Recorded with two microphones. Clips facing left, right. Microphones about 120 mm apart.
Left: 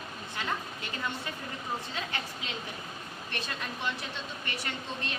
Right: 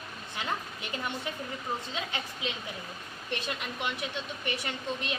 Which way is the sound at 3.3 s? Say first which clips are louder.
Right 3 dB; 20° right (ahead or behind).